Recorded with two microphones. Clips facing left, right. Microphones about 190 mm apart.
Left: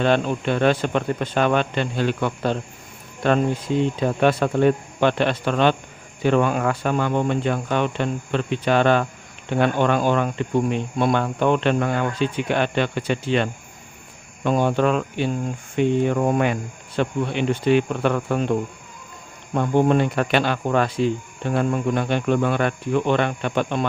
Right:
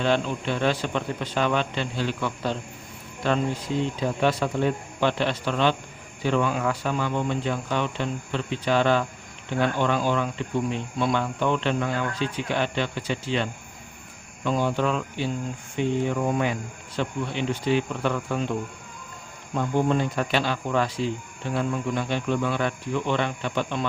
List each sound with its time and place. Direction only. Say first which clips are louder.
0.0 s speech: left 4 dB; 55° left (ahead or behind)
19.5 s speech: left 5 dB; 65° left (ahead or behind)